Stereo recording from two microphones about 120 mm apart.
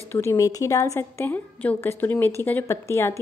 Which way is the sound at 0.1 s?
20° left (ahead or behind).